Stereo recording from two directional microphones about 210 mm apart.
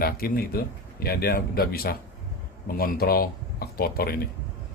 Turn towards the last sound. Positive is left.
turn(degrees=45)  # may be behind; listen again after turning